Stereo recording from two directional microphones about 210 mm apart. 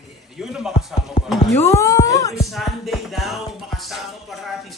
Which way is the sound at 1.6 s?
15° left (ahead or behind).